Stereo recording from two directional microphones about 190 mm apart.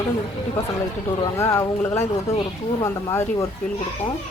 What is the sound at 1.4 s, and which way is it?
Speech, 15° left (ahead or behind).